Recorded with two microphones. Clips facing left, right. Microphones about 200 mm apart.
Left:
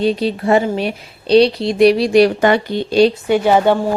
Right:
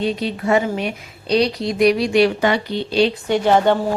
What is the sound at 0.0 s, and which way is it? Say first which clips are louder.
Speech: left 5 dB; 35° left (ahead or behind).